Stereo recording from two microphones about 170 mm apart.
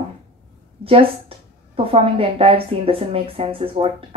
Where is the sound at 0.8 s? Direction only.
35° right (ahead or behind).